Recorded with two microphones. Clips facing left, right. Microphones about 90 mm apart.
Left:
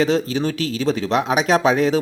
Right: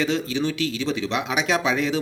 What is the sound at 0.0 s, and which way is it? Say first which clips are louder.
Speech: left 5 dB; 40° left (ahead or behind).